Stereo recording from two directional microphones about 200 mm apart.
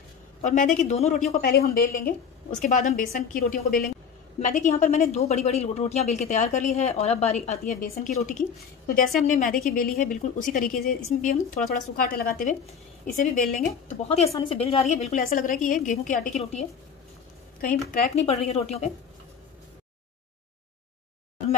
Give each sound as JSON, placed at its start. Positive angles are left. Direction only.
{"t": 0.4, "sound": "speech", "side_deg": 40}
{"t": 1.3, "sound": "a woman's voice", "side_deg": 50}
{"t": 14.0, "sound": "a woman's voice", "side_deg": 30}
{"t": 18.1, "sound": "speech", "side_deg": 30}